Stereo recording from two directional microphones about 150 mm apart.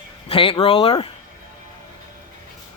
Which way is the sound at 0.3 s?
35° left (ahead or behind).